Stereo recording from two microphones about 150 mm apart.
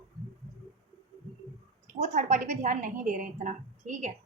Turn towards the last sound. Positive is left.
turn(degrees=-55)  # may be behind; listen again after turning